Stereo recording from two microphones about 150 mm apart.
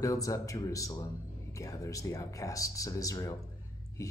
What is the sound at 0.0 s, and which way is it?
Speech, 20° left (ahead or behind).